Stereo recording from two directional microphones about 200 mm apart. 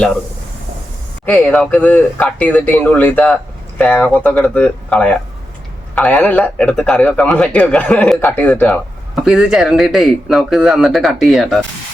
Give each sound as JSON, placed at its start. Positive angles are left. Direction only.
{"t": 1.2, "sound": "a man's voice", "side_deg": 5}